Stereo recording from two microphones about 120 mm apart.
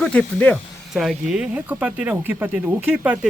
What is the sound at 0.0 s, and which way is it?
Speech, 5° left (ahead or behind).